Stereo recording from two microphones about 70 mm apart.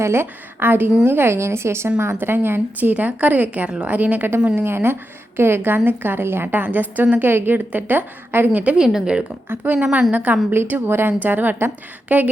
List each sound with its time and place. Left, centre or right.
0.0 s speech: right
2.9 s a woman's voice: centre
4.5 s a woman's voice: right
8.6 s a woman's voice: centre
9.5 s a woman's voice: right
10.5 s a woman's voice: right